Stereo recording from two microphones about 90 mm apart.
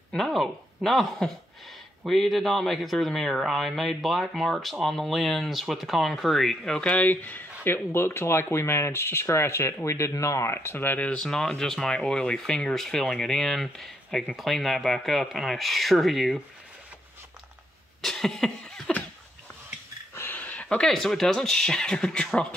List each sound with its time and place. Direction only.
0.1 s speech: 5° left (ahead or behind)
18.0 s cough: 5° left (ahead or behind)
20.2 s speech: 20° left (ahead or behind)